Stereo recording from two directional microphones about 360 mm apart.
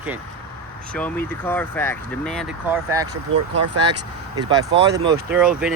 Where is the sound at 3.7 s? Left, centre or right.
Right.